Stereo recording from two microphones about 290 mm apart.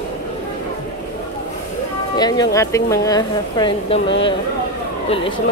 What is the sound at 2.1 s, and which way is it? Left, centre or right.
Speech, centre.